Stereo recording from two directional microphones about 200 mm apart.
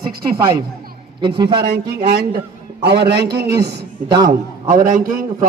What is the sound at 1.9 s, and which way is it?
A man's voice, 50° right (ahead or behind).